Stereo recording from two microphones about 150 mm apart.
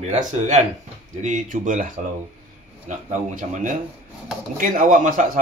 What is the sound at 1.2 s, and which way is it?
A man's voice, 60° right (ahead or behind).